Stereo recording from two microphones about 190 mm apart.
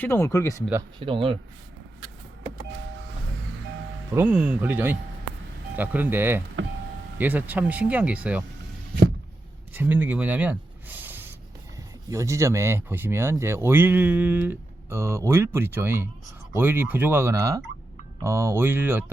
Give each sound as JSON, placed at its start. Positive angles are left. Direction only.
{"t": 0.0, "sound": "speech", "side_deg": 10}
{"t": 0.9, "sound": "speech", "side_deg": -25}
{"t": 4.1, "sound": "speech", "side_deg": -10}
{"t": 9.7, "sound": "speech", "side_deg": -10}